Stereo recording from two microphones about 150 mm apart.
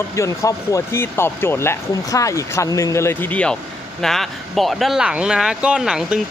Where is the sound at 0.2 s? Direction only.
20° left (ahead or behind).